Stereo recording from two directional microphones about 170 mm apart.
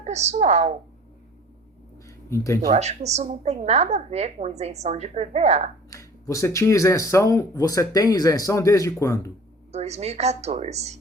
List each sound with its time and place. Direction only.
0.0 s a woman's voice: 40° right (ahead or behind)
2.0 s a sound: 15° left (ahead or behind)
2.7 s a woman's voice: 40° right (ahead or behind)
5.9 s speech: 15° left (ahead or behind)
9.7 s a woman's voice: 40° right (ahead or behind)